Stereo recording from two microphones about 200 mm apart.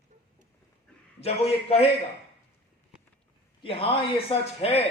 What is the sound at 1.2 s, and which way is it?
Speech, 30° left (ahead or behind).